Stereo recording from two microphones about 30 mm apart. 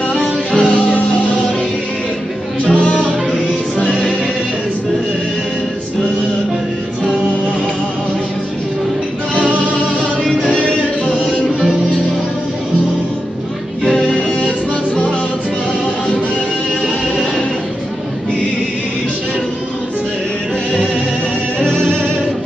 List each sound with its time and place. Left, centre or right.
0.6 s music: left
2.6 s music: left
10.4 s music: left
21.6 s music: left